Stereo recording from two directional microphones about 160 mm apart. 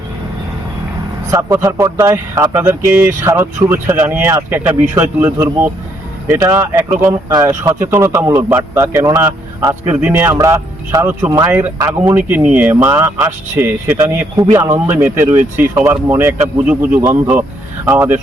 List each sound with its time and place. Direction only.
1.3 s a man's voice: 20° right (ahead or behind)